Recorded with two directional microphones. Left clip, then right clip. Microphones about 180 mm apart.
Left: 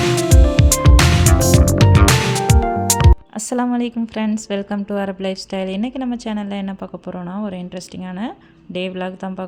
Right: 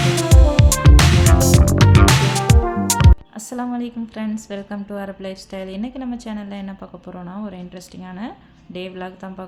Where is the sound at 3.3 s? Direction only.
45° left (ahead or behind).